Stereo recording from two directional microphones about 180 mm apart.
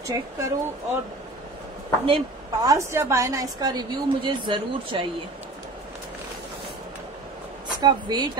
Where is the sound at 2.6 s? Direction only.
15° right (ahead or behind).